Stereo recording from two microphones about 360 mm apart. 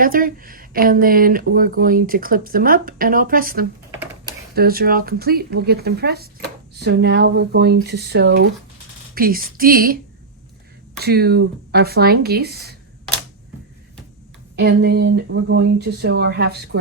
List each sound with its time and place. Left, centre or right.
0.0 s speech: right
11.0 s speech: right
14.6 s speech: right